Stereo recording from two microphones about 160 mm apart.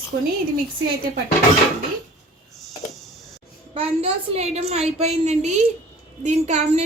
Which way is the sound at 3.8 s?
40° right (ahead or behind).